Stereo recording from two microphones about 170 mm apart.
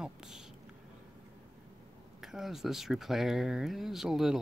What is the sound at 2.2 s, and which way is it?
Speech, centre (ahead or behind).